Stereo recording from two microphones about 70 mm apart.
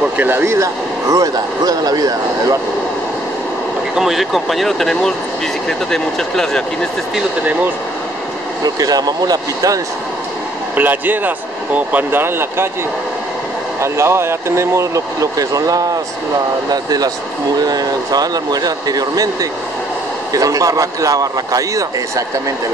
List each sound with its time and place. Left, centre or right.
0.2 s speech: right
3.9 s speech: centre
8.6 s a man's voice: right
10.8 s speech: right
13.7 s a man's voice: right
20.3 s a man's voice: right